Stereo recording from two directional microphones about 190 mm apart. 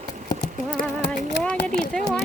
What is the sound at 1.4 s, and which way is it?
Speech, 5° left (ahead or behind).